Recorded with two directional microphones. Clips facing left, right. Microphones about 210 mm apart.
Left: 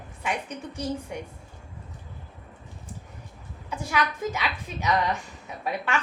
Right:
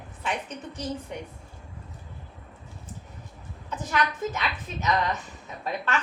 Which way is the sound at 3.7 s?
10° left (ahead or behind).